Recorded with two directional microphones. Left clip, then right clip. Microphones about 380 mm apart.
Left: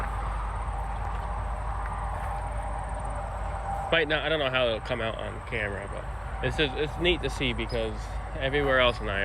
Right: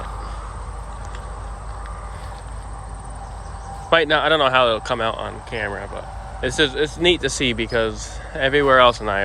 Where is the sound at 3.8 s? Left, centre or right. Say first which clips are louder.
Right 10 dB; centre.